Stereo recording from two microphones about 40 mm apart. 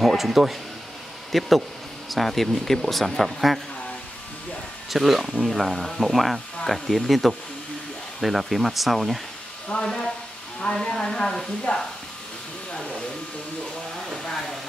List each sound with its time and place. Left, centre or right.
0.0 s speech: centre
4.9 s speech: centre
10.6 s speech: centre
12.7 s a sound: centre
14.2 s hair dryer: centre